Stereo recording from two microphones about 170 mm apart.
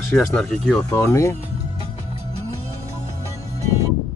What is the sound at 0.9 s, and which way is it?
Speech, 15° left (ahead or behind).